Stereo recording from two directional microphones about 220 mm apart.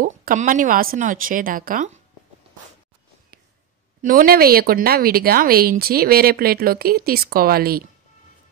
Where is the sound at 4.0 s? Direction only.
40° right (ahead or behind).